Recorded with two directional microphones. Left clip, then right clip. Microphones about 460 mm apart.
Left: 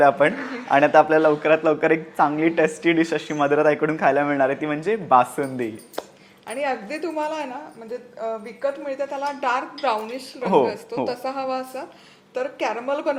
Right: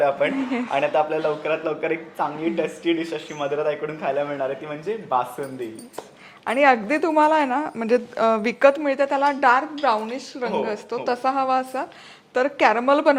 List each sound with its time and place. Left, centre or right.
0.7 s a man's voice: left
6.4 s a woman's voice: right
7.9 s speech: right
8.9 s a woman's voice: right